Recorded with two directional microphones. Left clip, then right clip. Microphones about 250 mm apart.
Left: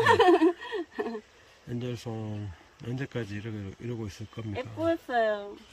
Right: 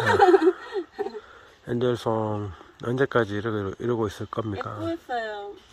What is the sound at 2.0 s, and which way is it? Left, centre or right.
Speech, centre.